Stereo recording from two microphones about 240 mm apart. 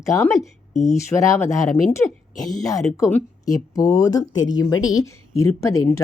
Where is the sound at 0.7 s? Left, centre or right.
Left.